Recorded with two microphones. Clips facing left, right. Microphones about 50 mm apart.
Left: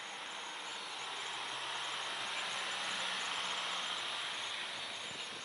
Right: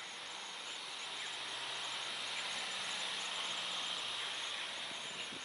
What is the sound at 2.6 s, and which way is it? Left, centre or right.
Vehicle, left.